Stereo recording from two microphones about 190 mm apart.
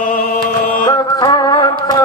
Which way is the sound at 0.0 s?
50° left (ahead or behind).